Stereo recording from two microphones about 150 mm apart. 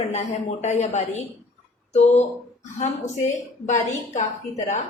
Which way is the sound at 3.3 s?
55° left (ahead or behind).